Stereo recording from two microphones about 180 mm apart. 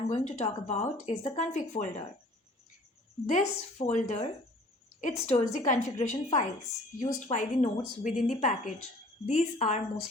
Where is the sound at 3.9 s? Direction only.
45° left (ahead or behind).